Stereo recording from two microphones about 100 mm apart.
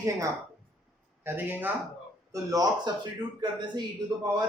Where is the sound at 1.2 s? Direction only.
20° right (ahead or behind).